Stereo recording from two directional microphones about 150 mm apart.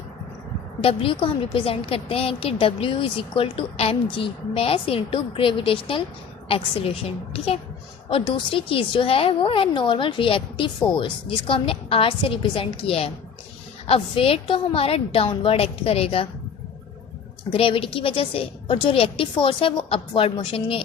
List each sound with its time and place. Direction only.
0.8 s a woman's voice: 35° left (ahead or behind)
17.5 s a woman's voice: 35° left (ahead or behind)